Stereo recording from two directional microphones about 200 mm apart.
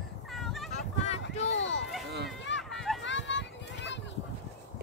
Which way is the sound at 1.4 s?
70° left (ahead or behind).